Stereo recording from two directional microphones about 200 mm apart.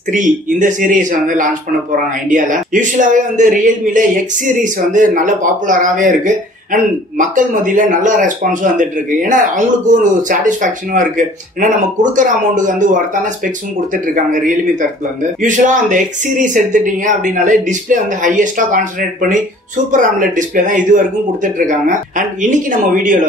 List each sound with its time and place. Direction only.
0.1 s speech: 40° right (ahead or behind)